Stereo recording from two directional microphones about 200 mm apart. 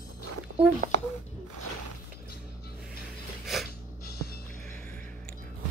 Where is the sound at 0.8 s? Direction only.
50° right (ahead or behind).